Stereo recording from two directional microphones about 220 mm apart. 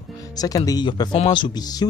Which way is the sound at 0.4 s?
15° left (ahead or behind).